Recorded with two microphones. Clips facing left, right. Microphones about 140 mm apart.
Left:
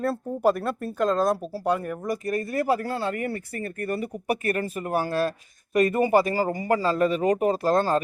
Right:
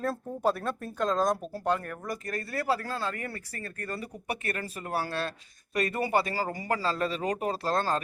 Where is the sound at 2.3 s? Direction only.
20° left (ahead or behind).